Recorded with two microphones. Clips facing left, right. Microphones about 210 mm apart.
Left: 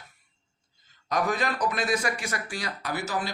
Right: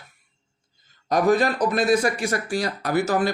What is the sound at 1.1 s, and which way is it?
Speech, 35° right (ahead or behind).